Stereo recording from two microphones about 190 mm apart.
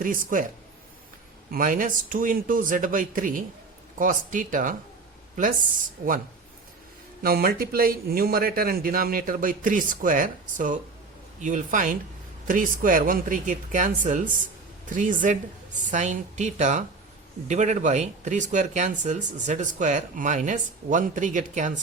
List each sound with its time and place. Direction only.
0.0 s speech: 45° right (ahead or behind)
1.5 s speech: 45° right (ahead or behind)
6.0 s speech: 45° right (ahead or behind)
7.2 s speech: 50° right (ahead or behind)